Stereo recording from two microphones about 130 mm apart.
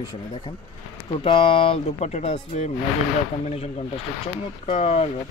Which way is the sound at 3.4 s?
55° left (ahead or behind).